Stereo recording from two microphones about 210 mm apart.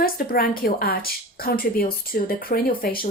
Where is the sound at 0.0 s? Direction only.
45° left (ahead or behind).